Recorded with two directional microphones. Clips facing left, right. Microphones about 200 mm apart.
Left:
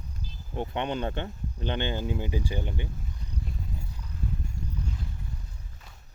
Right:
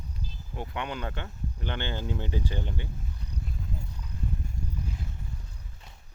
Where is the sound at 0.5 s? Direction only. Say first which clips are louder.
Left 5 dB; 25° left (ahead or behind).